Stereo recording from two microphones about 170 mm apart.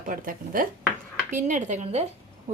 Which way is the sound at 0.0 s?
55° right (ahead or behind).